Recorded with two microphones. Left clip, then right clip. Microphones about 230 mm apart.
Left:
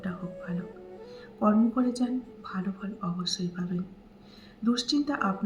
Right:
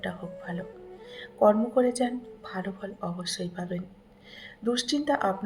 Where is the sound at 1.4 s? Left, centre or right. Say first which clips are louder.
Right 5 dB; right.